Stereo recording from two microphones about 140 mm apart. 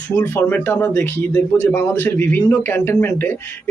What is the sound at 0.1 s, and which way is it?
Speech, 15° left (ahead or behind).